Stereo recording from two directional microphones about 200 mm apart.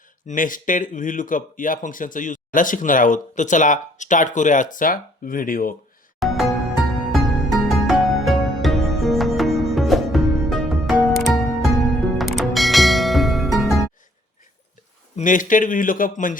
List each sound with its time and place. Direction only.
0.3 s speech: 40° left (ahead or behind)
6.1 s music: centre (ahead or behind)
15.1 s speech: 40° left (ahead or behind)